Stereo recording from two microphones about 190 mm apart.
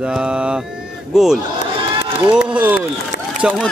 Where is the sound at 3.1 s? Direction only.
50° left (ahead or behind).